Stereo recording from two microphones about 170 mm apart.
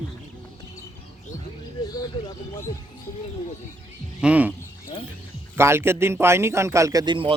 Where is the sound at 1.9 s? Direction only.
25° left (ahead or behind).